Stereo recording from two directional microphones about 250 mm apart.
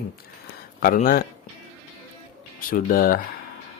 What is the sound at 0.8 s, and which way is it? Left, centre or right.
Speech, left.